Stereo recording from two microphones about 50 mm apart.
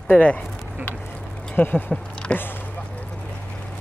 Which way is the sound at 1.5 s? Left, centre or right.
Left.